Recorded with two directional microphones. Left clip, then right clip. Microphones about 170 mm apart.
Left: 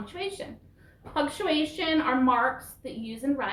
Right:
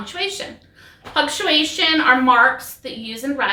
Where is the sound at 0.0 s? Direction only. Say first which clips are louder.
Right 10 dB; 5° right (ahead or behind).